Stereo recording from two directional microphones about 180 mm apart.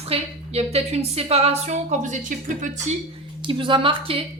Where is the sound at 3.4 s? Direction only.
30° right (ahead or behind).